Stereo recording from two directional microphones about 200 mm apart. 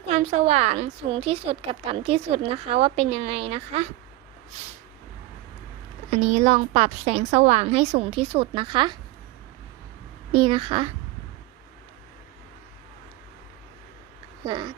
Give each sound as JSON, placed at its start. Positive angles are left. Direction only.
{"t": 0.1, "sound": "a woman's voice", "side_deg": -30}
{"t": 6.1, "sound": "a woman's voice", "side_deg": -35}
{"t": 10.3, "sound": "a child's voice", "side_deg": -25}
{"t": 14.4, "sound": "a child's voice", "side_deg": -20}